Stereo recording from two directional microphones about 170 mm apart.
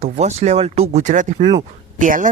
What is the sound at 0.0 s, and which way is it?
Speech, 40° right (ahead or behind).